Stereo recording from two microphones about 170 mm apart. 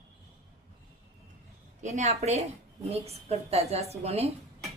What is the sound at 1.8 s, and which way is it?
A woman's voice, 40° right (ahead or behind).